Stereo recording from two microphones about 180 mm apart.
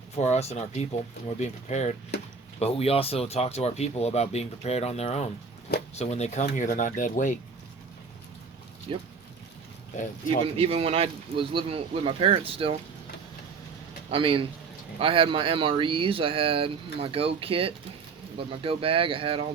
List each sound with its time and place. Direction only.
0.2 s speech: 40° left (ahead or behind)
8.9 s speech: 30° right (ahead or behind)
10.6 s speech: 30° right (ahead or behind)
14.1 s speech: 30° right (ahead or behind)